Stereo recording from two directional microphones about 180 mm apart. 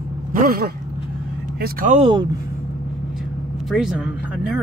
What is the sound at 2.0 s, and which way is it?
Speech, 25° right (ahead or behind).